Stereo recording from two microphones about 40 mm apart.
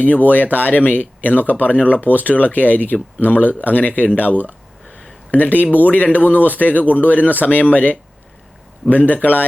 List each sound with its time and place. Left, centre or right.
0.3 s speech: left